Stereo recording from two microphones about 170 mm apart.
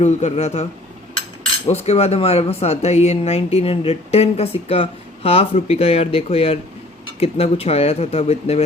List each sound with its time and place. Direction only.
0.0 s speech: 40° left (ahead or behind)